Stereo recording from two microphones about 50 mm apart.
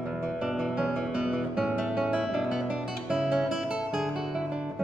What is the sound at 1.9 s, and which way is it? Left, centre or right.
Music, centre.